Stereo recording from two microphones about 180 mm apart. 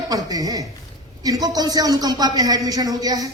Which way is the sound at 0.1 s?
20° right (ahead or behind).